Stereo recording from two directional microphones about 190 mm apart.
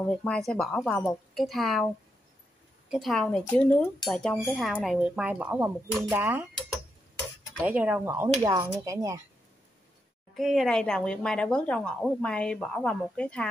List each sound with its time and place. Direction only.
0.0 s speech: 5° left (ahead or behind)
2.9 s speech: centre (ahead or behind)
7.6 s speech: 10° right (ahead or behind)
10.3 s speech: centre (ahead or behind)